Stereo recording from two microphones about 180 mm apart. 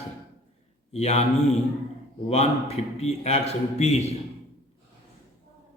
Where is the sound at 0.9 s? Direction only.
40° left (ahead or behind).